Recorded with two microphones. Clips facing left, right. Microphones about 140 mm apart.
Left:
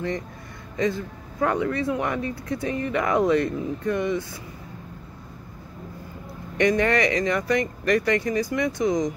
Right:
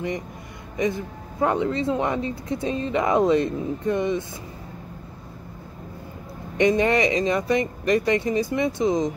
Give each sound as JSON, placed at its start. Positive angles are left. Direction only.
{"t": 0.7, "sound": "speech", "side_deg": -20}
{"t": 6.6, "sound": "speech", "side_deg": -20}